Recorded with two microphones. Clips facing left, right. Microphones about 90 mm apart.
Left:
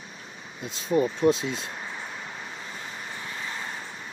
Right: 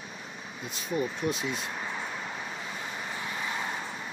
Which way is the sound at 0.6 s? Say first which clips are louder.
Left 7 dB; 25° left (ahead or behind).